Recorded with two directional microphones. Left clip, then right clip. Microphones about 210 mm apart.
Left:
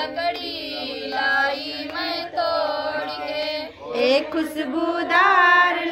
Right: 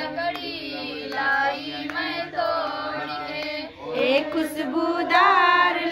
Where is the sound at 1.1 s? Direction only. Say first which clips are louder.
Left 2 dB; 55° left (ahead or behind).